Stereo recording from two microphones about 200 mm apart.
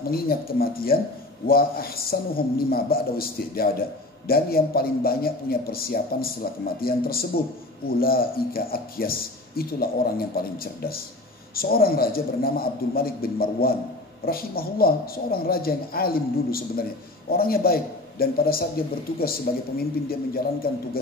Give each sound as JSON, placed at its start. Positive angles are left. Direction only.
{"t": 0.0, "sound": "a man's voice", "side_deg": 50}